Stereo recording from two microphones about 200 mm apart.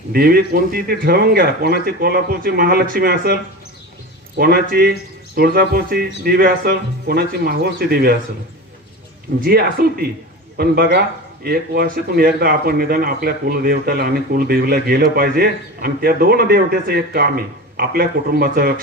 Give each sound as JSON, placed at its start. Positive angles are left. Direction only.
{"t": 0.1, "sound": "speech", "side_deg": -50}
{"t": 4.4, "sound": "speech", "side_deg": -50}
{"t": 9.4, "sound": "speech", "side_deg": -50}